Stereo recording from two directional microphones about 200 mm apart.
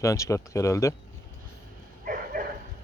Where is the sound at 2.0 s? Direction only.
45° right (ahead or behind).